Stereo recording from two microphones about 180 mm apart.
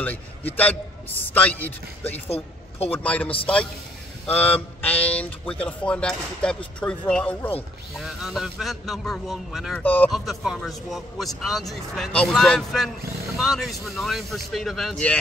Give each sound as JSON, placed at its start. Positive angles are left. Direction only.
{"t": 0.0, "sound": "a man's voice", "side_deg": 10}
{"t": 2.2, "sound": "speech", "side_deg": 35}
{"t": 2.9, "sound": "a man's voice", "side_deg": 10}
{"t": 4.3, "sound": "a man's voice", "side_deg": 10}